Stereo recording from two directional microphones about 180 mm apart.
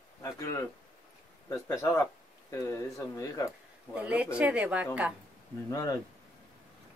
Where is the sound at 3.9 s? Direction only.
5° right (ahead or behind).